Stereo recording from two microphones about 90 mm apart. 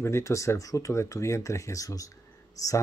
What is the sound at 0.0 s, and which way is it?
Speech, 30° left (ahead or behind).